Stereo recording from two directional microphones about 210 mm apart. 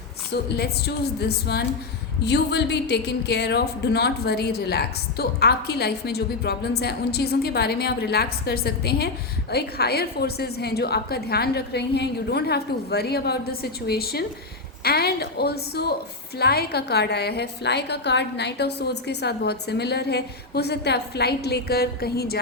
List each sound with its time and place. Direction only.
0.4 s speech: 50° left (ahead or behind)